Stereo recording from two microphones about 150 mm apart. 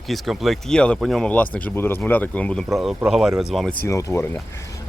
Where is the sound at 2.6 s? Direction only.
Centre (ahead or behind).